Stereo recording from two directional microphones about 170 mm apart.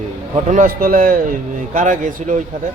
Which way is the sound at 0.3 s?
45° right (ahead or behind).